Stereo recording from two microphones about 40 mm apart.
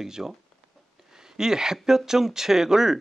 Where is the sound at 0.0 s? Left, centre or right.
Centre.